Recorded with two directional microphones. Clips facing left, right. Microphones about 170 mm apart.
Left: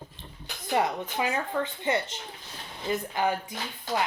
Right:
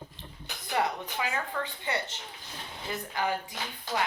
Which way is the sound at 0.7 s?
25° left (ahead or behind).